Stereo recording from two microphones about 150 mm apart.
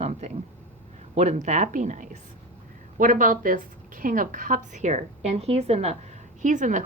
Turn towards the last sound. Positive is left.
turn(degrees=-55)  # may be behind; listen again after turning